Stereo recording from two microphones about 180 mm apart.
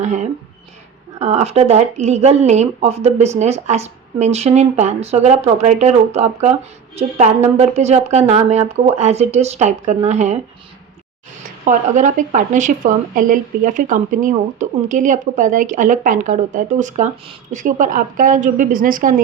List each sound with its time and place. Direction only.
0.0 s speech: 40° right (ahead or behind)
11.6 s speech: 45° right (ahead or behind)